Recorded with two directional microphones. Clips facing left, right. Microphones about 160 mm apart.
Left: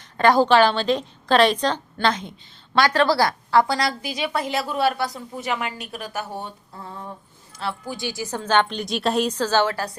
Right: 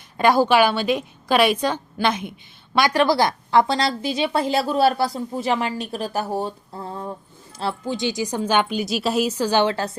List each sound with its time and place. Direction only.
0.2 s a woman's voice: 10° right (ahead or behind)